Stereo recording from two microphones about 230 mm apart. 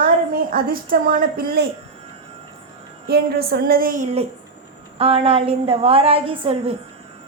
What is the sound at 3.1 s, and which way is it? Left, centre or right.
A woman's voice, right.